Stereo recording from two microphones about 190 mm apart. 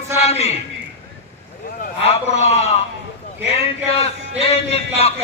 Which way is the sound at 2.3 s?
35° left (ahead or behind).